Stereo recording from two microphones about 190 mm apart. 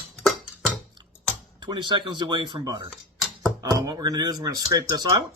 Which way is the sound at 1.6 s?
25° right (ahead or behind).